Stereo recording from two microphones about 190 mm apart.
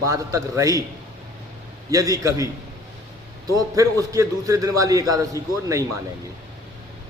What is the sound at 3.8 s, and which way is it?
A man's voice, 15° right (ahead or behind).